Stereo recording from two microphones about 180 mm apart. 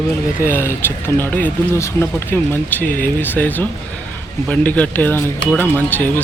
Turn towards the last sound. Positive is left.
turn(degrees=10)  # may be behind; listen again after turning